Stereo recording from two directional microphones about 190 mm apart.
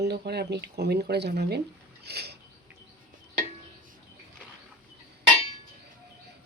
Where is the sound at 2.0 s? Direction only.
60° right (ahead or behind).